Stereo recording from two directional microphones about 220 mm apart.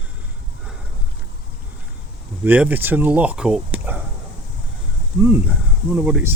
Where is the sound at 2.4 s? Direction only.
10° right (ahead or behind).